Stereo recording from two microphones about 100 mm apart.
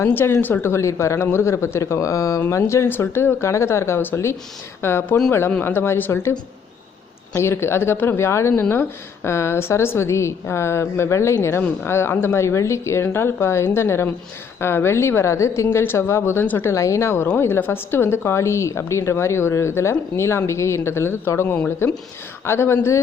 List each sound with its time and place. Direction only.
0.0 s a woman's voice: 25° left (ahead or behind)
7.3 s a woman's voice: 25° left (ahead or behind)